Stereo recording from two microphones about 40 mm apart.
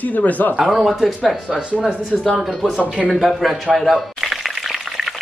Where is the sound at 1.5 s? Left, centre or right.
Centre.